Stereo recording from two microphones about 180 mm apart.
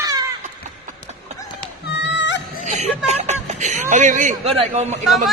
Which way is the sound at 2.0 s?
75° left (ahead or behind).